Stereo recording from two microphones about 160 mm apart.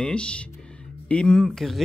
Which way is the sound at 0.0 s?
5° left (ahead or behind).